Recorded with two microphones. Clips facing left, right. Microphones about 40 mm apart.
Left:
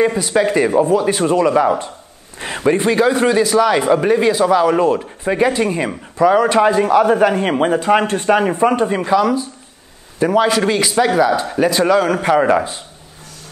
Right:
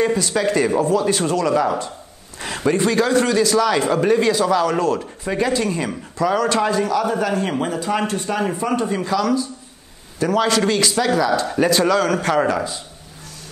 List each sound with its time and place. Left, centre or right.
0.0 s a man's voice: centre
11.5 s a man's voice: centre
12.4 s a man's voice: left